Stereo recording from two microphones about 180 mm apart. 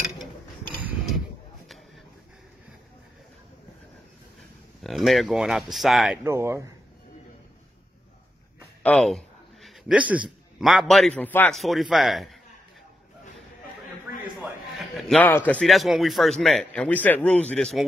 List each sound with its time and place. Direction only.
0.8 s mechanisms: centre (ahead or behind)
4.8 s a man's voice: centre (ahead or behind)
6.2 s speech: 15° right (ahead or behind)
8.8 s a man's voice: 5° left (ahead or behind)
15.0 s a man's voice: 5° left (ahead or behind)